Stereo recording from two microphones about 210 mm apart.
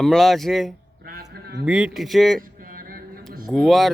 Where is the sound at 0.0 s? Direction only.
Centre (ahead or behind).